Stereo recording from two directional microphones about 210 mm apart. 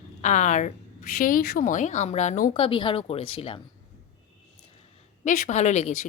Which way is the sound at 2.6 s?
25° left (ahead or behind).